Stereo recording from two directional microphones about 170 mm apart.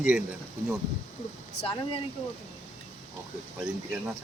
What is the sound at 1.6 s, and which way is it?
Speech, 80° left.